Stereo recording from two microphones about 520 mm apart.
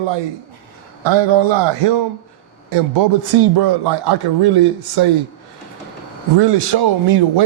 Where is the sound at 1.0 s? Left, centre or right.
Right.